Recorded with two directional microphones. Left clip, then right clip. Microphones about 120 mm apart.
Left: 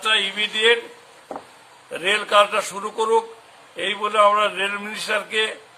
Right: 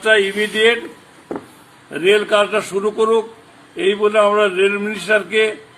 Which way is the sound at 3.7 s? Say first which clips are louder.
Right 5 dB; 65° left (ahead or behind).